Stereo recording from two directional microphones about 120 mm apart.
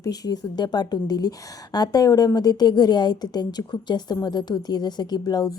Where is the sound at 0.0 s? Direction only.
35° left (ahead or behind).